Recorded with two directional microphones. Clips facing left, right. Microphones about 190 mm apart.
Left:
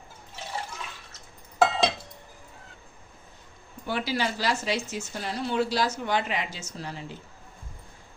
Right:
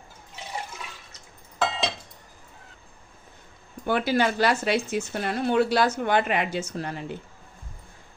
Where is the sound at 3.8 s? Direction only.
55° right (ahead or behind).